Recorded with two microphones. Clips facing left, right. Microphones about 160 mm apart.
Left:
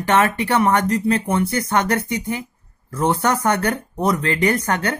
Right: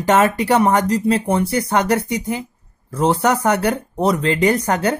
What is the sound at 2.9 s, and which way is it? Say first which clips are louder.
Speech: right 3 dB; 30° right (ahead or behind).